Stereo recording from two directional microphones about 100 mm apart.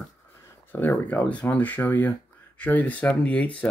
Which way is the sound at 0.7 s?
20° left (ahead or behind).